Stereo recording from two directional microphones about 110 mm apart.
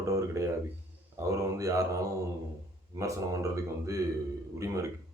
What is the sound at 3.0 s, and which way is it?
Speech, 30° right (ahead or behind).